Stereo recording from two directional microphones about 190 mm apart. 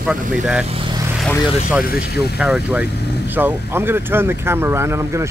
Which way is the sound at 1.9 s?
50° left (ahead or behind).